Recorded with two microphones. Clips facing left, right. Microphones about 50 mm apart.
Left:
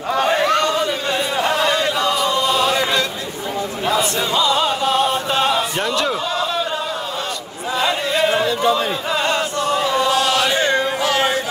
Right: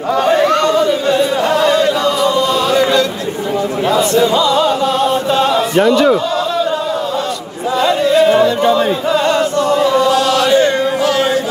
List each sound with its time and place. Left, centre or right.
0.2 s a sound: centre
4.4 s music: centre
5.8 s a man's voice: centre
7.8 s music: centre
9.1 s chant: centre
10.1 s chant: left